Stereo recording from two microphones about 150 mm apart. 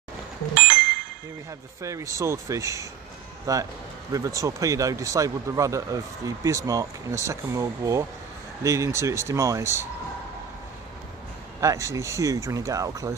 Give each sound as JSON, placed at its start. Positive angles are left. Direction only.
{"t": 0.6, "sound": "a sound", "side_deg": -90}
{"t": 1.8, "sound": "a man's voice", "side_deg": -20}
{"t": 11.6, "sound": "a man's voice", "side_deg": -20}